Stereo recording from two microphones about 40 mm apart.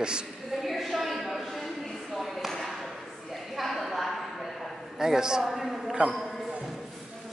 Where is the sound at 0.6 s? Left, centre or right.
Centre.